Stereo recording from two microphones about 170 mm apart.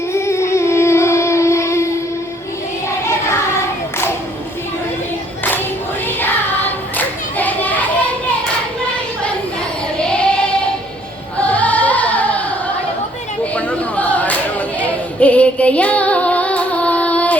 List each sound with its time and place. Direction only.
0.1 s a sound: 15° left (ahead or behind)
6.1 s music: 10° left (ahead or behind)
6.9 s hands: 10° left (ahead or behind)
10.0 s child singing: 5° left (ahead or behind)
11.3 s choir: 10° left (ahead or behind)
13.4 s a sound: 10° left (ahead or behind)